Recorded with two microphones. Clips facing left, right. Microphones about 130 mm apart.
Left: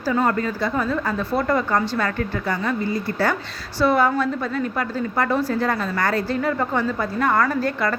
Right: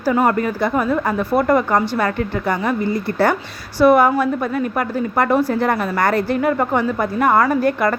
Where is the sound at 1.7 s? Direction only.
15° right (ahead or behind).